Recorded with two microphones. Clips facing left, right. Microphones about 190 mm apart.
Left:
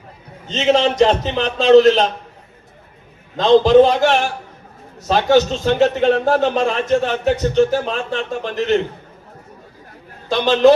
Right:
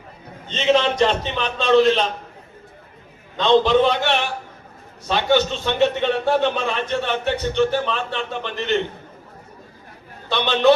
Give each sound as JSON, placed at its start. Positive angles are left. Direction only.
{"t": 0.9, "sound": "speech", "side_deg": 40}
{"t": 3.3, "sound": "a man's voice", "side_deg": 40}
{"t": 10.2, "sound": "a man's voice", "side_deg": 45}